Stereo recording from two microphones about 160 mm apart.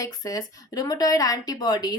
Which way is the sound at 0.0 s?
20° left (ahead or behind).